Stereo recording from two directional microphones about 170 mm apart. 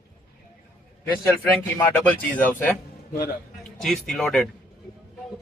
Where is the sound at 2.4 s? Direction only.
10° left (ahead or behind).